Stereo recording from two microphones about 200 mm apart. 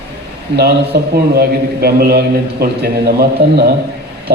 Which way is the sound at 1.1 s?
50° right (ahead or behind).